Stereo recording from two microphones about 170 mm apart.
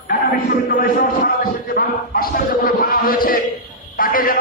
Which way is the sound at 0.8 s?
55° left (ahead or behind).